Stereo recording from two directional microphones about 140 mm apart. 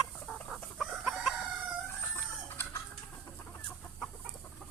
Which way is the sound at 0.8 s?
Centre (ahead or behind).